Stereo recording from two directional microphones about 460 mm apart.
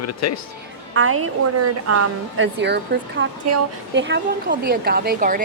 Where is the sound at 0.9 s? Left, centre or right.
Right.